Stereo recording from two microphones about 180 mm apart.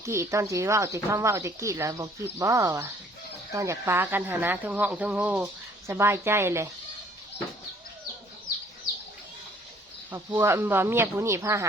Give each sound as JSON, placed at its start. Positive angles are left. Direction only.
{"t": 0.0, "sound": "speech", "side_deg": -15}
{"t": 10.1, "sound": "speech", "side_deg": -10}